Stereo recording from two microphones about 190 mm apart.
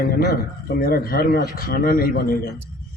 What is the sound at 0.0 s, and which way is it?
Speech, 55° left (ahead or behind).